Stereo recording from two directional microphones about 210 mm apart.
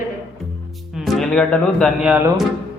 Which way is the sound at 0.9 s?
Centre (ahead or behind).